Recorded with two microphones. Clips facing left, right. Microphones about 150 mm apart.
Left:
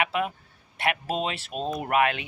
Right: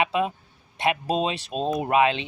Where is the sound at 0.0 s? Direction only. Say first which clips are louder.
Right 3 dB; 20° right (ahead or behind).